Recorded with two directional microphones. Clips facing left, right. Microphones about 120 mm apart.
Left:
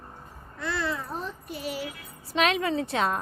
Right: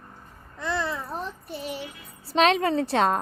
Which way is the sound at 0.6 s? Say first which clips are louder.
Right 2 dB; 20° right (ahead or behind).